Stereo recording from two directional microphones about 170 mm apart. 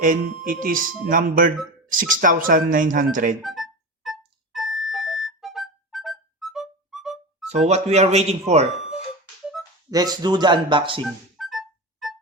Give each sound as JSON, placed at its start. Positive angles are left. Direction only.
{"t": 0.0, "sound": "speech", "side_deg": -50}
{"t": 3.4, "sound": "music", "side_deg": 0}
{"t": 7.7, "sound": "a man's voice", "side_deg": -40}
{"t": 9.9, "sound": "speech", "side_deg": -25}
{"t": 11.3, "sound": "music", "side_deg": 0}